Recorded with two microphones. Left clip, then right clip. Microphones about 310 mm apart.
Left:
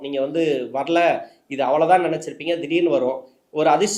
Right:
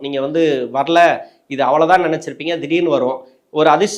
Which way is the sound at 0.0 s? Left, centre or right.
Right.